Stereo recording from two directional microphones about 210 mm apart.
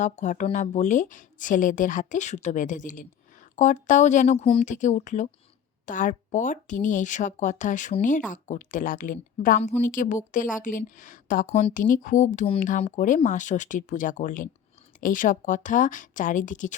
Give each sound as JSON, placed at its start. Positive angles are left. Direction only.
{"t": 0.0, "sound": "a woman's voice", "side_deg": 35}